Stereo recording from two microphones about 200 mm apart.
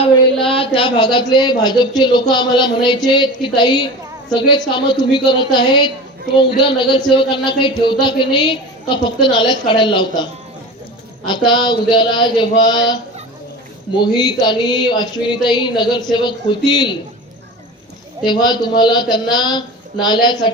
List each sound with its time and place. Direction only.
0.4 s a woman's voice: 25° left (ahead or behind)
6.9 s a woman's voice: 25° left (ahead or behind)
11.3 s a woman's voice: 20° left (ahead or behind)
14.0 s a woman's voice: 20° left (ahead or behind)
18.3 s a woman's voice: 20° left (ahead or behind)